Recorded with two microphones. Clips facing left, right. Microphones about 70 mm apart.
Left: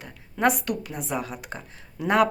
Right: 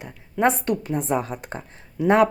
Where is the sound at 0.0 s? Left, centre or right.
Right.